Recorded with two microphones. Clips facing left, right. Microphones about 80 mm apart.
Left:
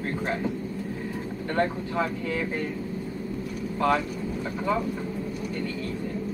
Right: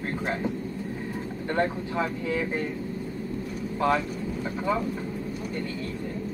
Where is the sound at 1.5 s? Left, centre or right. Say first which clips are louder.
Left 1 dB; centre.